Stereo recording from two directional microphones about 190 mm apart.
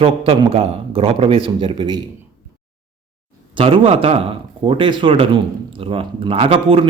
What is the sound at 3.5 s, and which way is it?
Speech, 30° right (ahead or behind).